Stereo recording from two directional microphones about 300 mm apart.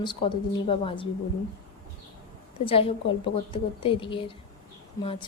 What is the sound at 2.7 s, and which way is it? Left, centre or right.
A woman's voice, centre.